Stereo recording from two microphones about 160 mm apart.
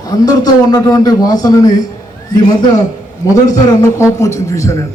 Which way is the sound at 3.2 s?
20° left (ahead or behind).